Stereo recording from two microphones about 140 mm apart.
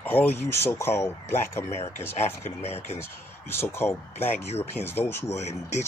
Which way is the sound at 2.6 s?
50° left (ahead or behind).